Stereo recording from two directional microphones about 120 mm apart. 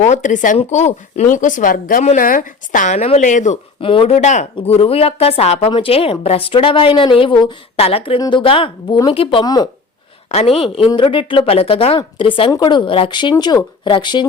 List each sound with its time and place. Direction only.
0.0 s speech: 85° left
0.6 s speech: 70° left (ahead or behind); by 3.6 s 85° left
3.8 s a woman's voice: 50° left (ahead or behind)
4.1 s speech: 80° left
4.5 s a woman's voice: 55° left (ahead or behind)
7.8 s a woman's voice: 55° left (ahead or behind)
8.2 s a woman's voice: 40° left (ahead or behind)
10.2 s a woman's voice: 65° left (ahead or behind)
10.8 s a woman's voice: 45° left (ahead or behind)